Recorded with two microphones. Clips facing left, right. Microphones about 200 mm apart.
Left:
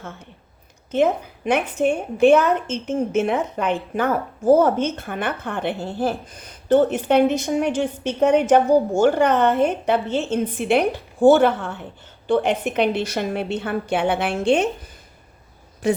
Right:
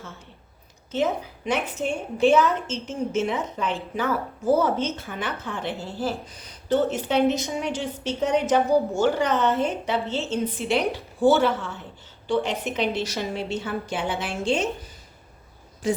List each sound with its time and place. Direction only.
0.9 s a woman's voice: 55° left (ahead or behind)
15.8 s a woman's voice: 65° left (ahead or behind)